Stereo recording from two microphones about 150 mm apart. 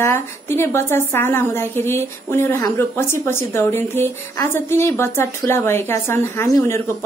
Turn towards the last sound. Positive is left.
turn(degrees=15)  # may be behind; listen again after turning